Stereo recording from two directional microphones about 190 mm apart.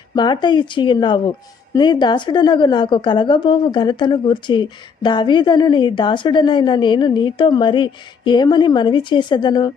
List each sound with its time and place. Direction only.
0.2 s a woman's voice: 25° left (ahead or behind)